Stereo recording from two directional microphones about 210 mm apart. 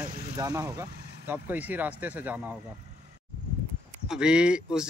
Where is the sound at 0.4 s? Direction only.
15° right (ahead or behind).